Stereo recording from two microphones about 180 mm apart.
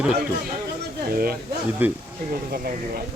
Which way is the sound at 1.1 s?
55° right (ahead or behind).